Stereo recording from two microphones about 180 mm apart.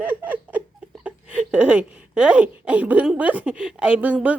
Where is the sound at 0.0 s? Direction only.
10° right (ahead or behind).